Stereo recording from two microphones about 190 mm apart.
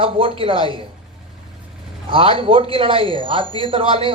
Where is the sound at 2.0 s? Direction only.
30° right (ahead or behind).